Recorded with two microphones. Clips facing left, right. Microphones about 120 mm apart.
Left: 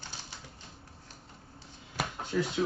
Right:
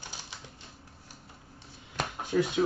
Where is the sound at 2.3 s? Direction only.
20° right (ahead or behind).